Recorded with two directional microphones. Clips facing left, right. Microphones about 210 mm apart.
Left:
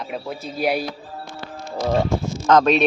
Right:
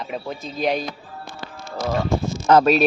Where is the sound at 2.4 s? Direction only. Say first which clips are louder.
Right 1 dB; 5° right (ahead or behind).